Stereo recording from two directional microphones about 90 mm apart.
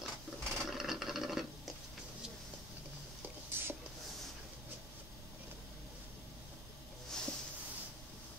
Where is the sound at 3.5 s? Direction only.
25° right (ahead or behind).